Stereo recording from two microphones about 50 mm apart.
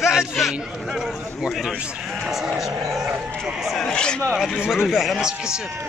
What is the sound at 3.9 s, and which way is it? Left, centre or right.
Speech, centre.